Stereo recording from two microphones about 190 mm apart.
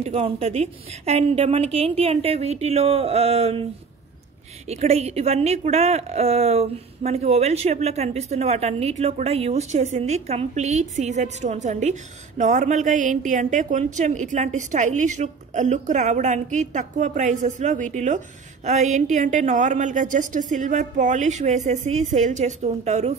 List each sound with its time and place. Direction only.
0.0 s a woman's voice: 30° right (ahead or behind)
4.6 s a woman's voice: 35° right (ahead or behind)